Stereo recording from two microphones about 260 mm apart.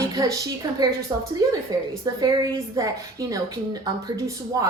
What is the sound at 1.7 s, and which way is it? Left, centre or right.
A woman's voice, centre.